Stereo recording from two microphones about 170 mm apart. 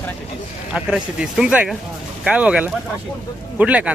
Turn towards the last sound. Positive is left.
turn(degrees=-10)  # may be behind; listen again after turning